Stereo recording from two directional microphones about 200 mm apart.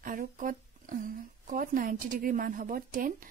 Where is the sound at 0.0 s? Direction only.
45° right (ahead or behind).